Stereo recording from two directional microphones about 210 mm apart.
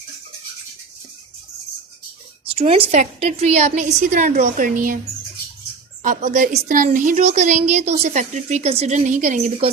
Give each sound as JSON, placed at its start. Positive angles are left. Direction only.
{"t": 2.6, "sound": "a woman's voice", "side_deg": -25}
{"t": 6.0, "sound": "a woman's voice", "side_deg": -40}